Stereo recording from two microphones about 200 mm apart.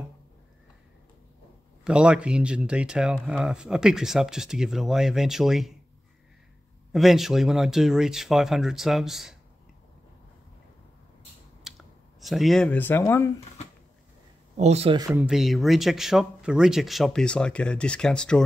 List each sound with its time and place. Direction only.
1.9 s speech: 5° right (ahead or behind)
6.9 s speech: centre (ahead or behind)
11.7 s clicking: centre (ahead or behind)
12.2 s speech: centre (ahead or behind)
14.6 s speech: 30° right (ahead or behind)
15.0 s speech: 15° right (ahead or behind)
15.2 s speech: centre (ahead or behind)